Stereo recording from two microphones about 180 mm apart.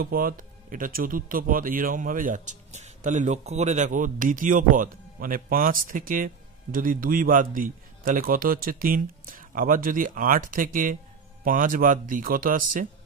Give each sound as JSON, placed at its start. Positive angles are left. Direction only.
{"t": 0.0, "sound": "speech", "side_deg": -55}